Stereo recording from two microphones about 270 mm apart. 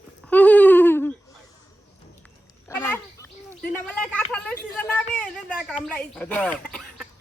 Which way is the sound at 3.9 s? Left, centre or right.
Centre.